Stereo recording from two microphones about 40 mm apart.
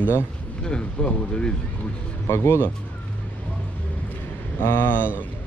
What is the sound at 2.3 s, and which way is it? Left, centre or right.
Speech, left.